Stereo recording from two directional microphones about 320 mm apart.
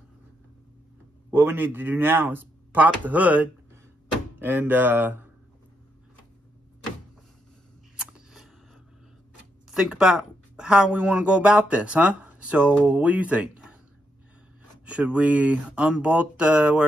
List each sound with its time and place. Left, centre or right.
1.3 s a man's voice: centre
8.0 s a sound: centre
9.7 s speech: centre
14.9 s a man's voice: centre